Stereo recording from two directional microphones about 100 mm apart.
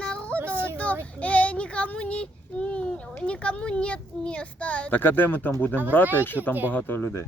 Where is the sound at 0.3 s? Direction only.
20° right (ahead or behind).